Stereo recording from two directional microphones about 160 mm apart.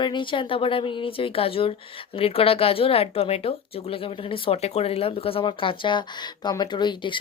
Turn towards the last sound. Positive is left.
turn(degrees=30)  # may be behind; listen again after turning